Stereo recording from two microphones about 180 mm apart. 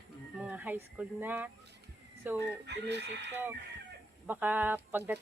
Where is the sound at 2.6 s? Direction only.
70° right (ahead or behind).